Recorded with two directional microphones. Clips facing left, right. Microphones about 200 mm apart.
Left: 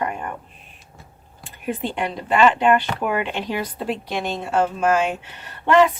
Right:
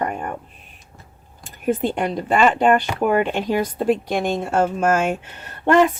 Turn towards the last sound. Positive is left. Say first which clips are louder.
# right 1 dB
turn(degrees=-50)  # may be behind; listen again after turning